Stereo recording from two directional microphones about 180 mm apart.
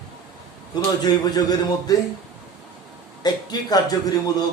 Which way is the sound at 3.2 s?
20° left (ahead or behind).